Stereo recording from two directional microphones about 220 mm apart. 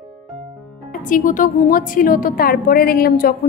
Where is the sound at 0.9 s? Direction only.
35° left (ahead or behind).